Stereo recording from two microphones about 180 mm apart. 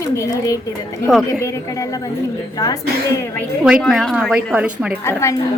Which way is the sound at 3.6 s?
5° right (ahead or behind).